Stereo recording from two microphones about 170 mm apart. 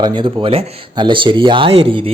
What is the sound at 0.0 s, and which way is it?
Speech, 25° right (ahead or behind).